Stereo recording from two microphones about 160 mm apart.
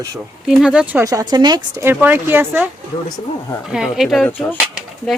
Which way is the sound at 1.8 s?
10° right (ahead or behind).